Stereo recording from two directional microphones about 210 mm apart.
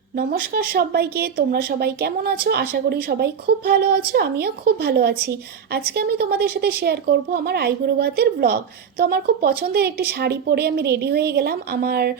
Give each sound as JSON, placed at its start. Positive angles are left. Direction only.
{"t": 0.2, "sound": "speech", "side_deg": -45}